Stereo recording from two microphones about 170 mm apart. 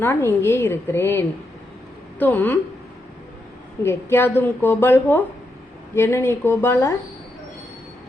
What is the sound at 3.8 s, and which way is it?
A woman's voice, 15° left (ahead or behind).